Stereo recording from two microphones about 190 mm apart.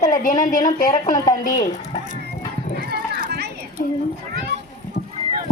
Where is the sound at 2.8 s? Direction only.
50° right (ahead or behind).